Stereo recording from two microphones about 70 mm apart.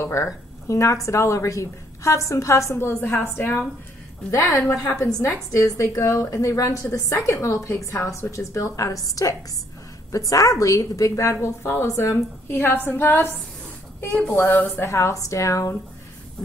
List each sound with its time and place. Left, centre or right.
0.0 s a woman's voice: left
5.0 s a woman's voice: left
14.9 s a woman's voice: left